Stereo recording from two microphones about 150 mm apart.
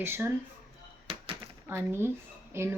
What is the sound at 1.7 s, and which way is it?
Speech, 15° right (ahead or behind).